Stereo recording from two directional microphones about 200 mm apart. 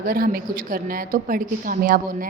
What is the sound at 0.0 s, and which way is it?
A woman's voice, 45° right (ahead or behind).